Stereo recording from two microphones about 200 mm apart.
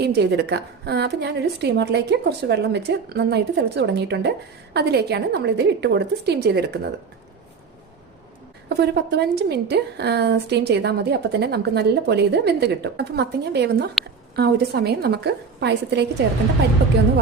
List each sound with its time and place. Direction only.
0.0 s a woman's voice: 55° right (ahead or behind)
8.7 s a woman's voice: 55° right (ahead or behind)